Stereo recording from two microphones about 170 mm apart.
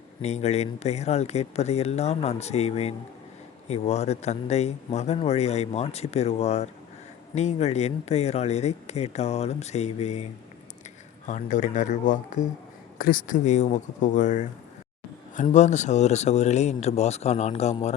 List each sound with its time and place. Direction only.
0.2 s speech: 40° left (ahead or behind)
11.3 s speech: 45° left (ahead or behind)
15.5 s speech: 45° left (ahead or behind)